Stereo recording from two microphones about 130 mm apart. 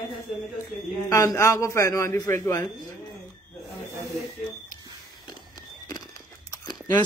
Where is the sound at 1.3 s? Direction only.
20° left (ahead or behind).